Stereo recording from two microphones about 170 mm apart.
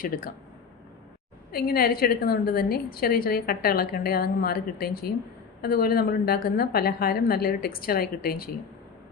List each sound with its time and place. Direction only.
1.5 s a woman's voice: 65° left (ahead or behind)